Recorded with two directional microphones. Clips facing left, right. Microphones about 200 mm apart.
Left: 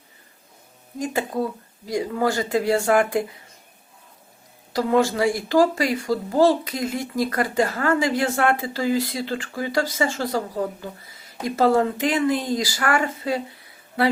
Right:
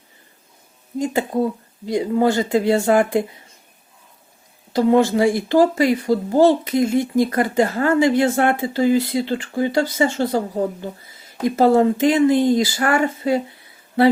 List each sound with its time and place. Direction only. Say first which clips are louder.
0.9 s speech: right 5 dB; 25° right (ahead or behind)
4.7 s speech: right 5 dB; 25° right (ahead or behind)